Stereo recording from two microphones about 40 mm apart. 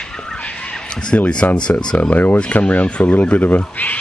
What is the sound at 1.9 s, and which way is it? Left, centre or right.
Speech, left.